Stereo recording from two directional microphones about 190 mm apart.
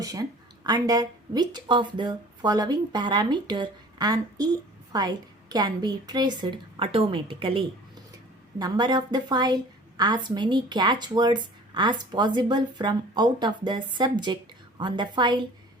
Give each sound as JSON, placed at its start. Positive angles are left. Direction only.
{"t": 0.0, "sound": "speech", "side_deg": -20}